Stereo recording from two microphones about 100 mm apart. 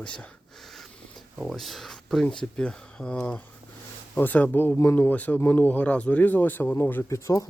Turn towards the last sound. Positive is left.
turn(degrees=30)  # may be behind; listen again after turning